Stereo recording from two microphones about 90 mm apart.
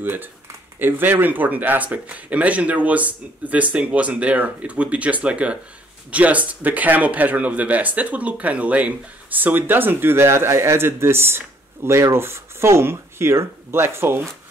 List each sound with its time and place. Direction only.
0.0 s speech: 20° right (ahead or behind)